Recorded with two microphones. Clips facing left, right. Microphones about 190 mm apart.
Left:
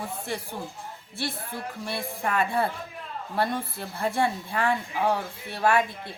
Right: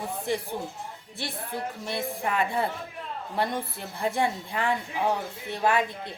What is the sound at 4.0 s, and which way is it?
A woman's voice, 15° right (ahead or behind).